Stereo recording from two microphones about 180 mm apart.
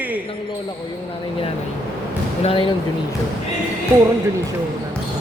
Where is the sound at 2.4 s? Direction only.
30° left (ahead or behind).